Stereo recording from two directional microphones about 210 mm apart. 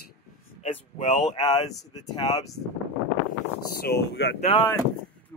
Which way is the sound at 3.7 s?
50° left (ahead or behind).